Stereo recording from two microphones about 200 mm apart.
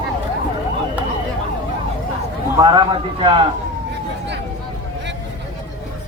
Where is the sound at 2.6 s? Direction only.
25° right (ahead or behind).